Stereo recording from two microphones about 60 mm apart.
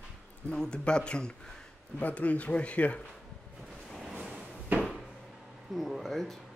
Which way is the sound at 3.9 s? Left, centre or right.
Centre.